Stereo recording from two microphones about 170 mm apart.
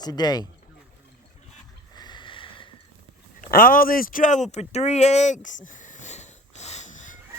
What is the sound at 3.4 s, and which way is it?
Speech, 60° left (ahead or behind).